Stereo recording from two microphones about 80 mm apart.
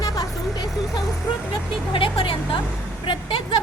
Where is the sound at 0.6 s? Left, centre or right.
Centre.